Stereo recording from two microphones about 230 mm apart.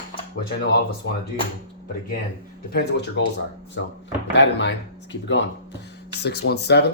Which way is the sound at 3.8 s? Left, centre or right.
Left.